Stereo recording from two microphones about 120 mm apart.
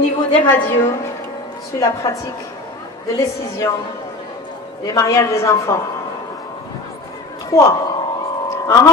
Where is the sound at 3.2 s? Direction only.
25° left (ahead or behind).